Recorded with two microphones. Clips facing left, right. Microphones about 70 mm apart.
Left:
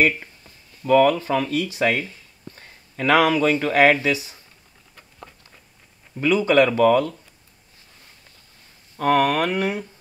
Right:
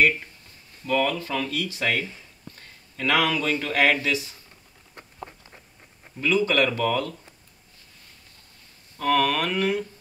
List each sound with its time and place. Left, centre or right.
0.8 s speech: left
6.2 s speech: left
8.9 s speech: left